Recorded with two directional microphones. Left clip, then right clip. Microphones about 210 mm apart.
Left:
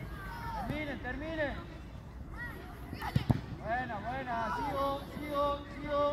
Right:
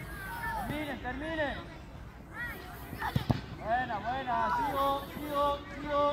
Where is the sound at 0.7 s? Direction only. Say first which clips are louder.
Right 2 dB; 25° left (ahead or behind).